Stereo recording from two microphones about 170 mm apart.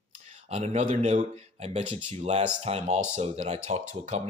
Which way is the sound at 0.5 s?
40° right (ahead or behind).